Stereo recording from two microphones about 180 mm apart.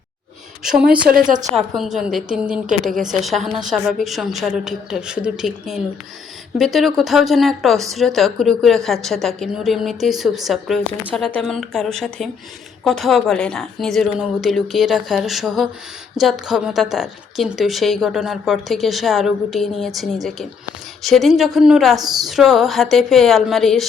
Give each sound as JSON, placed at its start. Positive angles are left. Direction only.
{"t": 0.6, "sound": "a woman's voice", "side_deg": -5}